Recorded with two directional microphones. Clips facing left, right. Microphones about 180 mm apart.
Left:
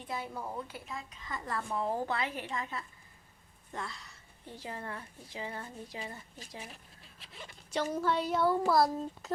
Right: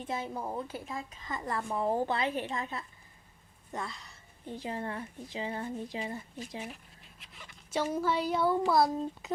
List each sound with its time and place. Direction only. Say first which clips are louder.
0.1 s speech: right 3 dB; 25° right (ahead or behind)
1.3 s speech: right 2 dB; 20° right (ahead or behind)
4.4 s speech: right 5 dB; 25° right (ahead or behind)
7.2 s speech: left 5 dB; 30° left (ahead or behind)
7.7 s speech: right 1 dB; 5° right (ahead or behind)